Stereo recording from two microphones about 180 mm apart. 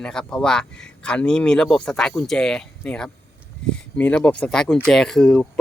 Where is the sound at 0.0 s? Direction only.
5° left (ahead or behind).